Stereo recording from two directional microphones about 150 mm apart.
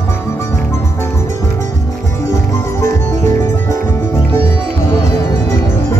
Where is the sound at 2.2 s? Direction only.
20° left (ahead or behind).